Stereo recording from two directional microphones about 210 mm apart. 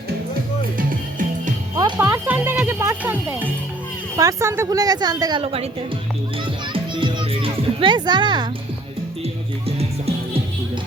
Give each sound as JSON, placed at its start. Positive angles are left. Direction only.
{"t": 1.7, "sound": "music", "side_deg": -15}
{"t": 4.2, "sound": "a woman's voice", "side_deg": -15}
{"t": 6.4, "sound": "children playing", "side_deg": -25}
{"t": 9.2, "sound": "music", "side_deg": -30}